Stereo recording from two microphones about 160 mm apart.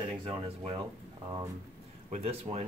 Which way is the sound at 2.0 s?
45° right (ahead or behind).